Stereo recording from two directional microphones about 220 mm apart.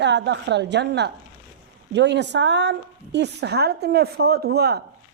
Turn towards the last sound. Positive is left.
turn(degrees=-45)  # may be behind; listen again after turning